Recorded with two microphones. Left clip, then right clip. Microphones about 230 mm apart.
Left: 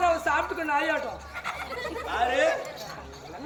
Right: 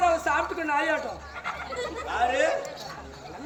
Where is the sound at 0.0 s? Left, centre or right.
Centre.